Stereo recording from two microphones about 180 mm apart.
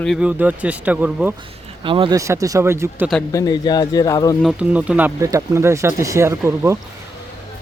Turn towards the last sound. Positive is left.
turn(degrees=-15)  # may be behind; listen again after turning